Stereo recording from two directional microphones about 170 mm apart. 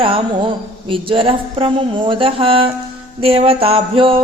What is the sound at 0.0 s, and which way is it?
Speech, 30° right (ahead or behind).